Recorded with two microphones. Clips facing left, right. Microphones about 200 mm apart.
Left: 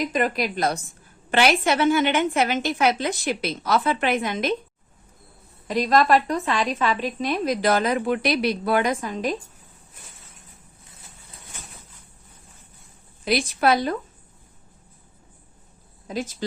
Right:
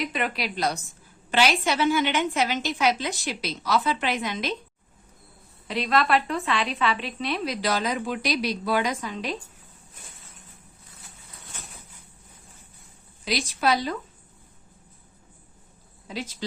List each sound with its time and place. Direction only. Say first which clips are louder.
0.0 s a woman's voice: left 5 dB; 40° left (ahead or behind)
5.6 s a woman's voice: left 5 dB; 40° left (ahead or behind)
13.2 s a woman's voice: left 4 dB; 55° left (ahead or behind)
16.0 s a woman's voice: left 5 dB; 45° left (ahead or behind)